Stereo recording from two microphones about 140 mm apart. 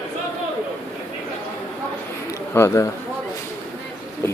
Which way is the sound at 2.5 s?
20° left (ahead or behind).